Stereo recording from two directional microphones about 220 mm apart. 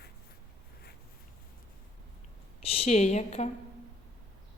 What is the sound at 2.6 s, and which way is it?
Speech, 25° left (ahead or behind).